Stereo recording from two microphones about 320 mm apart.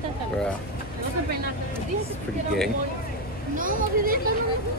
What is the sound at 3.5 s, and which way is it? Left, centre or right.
Speech, right.